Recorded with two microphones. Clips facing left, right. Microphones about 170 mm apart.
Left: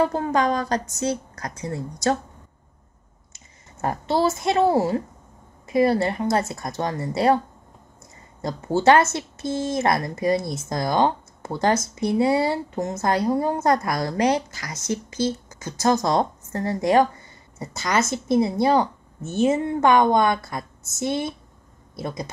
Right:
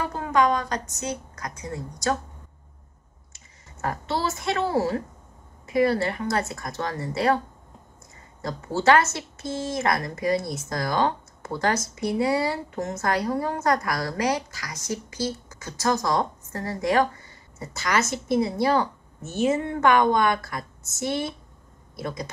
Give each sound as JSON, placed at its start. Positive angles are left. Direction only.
{"t": 0.0, "sound": "speech", "side_deg": 35}
{"t": 3.3, "sound": "a woman's voice", "side_deg": 25}
{"t": 8.4, "sound": "speech", "side_deg": 20}
{"t": 18.1, "sound": "speech", "side_deg": 25}